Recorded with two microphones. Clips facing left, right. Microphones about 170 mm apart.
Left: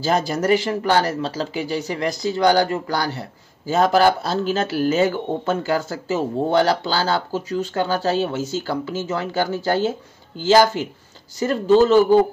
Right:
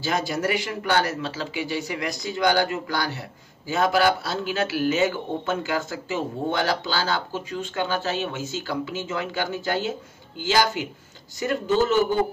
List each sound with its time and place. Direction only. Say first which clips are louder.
0.0 s speech: left 5 dB; 35° left (ahead or behind)